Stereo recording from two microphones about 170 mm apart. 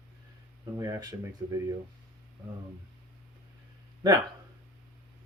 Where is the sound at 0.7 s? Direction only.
20° right (ahead or behind).